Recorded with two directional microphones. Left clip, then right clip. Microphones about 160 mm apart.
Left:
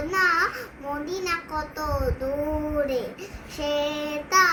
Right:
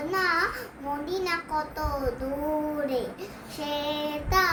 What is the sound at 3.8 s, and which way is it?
Child singing, 5° right (ahead or behind).